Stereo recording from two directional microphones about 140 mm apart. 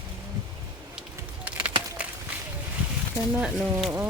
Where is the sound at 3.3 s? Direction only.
5° right (ahead or behind).